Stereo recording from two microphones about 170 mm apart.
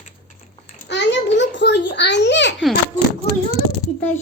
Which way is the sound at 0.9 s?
90° left.